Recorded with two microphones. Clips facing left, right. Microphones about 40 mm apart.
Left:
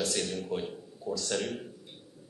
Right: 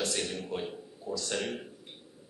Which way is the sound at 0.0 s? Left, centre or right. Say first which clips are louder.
Left 1 dB; centre.